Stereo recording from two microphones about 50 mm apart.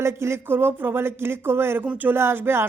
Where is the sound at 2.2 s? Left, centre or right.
Right.